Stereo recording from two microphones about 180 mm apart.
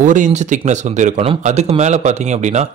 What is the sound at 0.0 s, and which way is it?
Speech, 45° right (ahead or behind).